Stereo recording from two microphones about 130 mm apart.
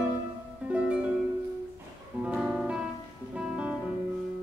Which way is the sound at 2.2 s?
5° right (ahead or behind).